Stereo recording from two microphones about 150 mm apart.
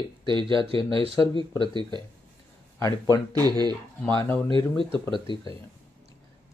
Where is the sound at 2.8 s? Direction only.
25° left (ahead or behind).